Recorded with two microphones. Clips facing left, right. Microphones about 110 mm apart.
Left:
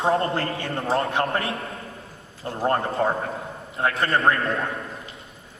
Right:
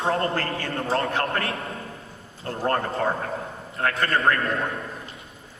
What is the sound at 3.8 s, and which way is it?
Speech, 25° left (ahead or behind).